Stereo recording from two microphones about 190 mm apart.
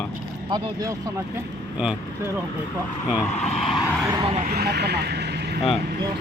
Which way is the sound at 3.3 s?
35° left (ahead or behind).